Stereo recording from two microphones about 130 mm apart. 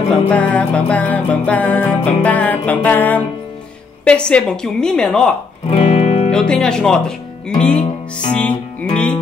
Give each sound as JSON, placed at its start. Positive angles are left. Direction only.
{"t": 0.1, "sound": "music", "side_deg": 10}
{"t": 4.0, "sound": "speech", "side_deg": 10}
{"t": 5.7, "sound": "music", "side_deg": 50}
{"t": 6.3, "sound": "speech", "side_deg": 5}
{"t": 8.3, "sound": "music", "side_deg": 10}